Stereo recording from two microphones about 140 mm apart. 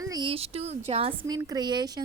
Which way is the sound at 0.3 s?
45° right (ahead or behind).